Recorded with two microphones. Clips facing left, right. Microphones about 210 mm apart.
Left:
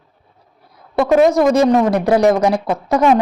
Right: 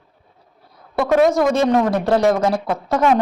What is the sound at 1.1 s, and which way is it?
Speech, centre (ahead or behind).